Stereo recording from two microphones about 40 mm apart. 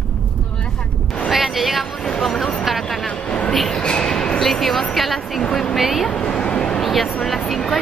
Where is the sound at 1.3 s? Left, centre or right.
Centre.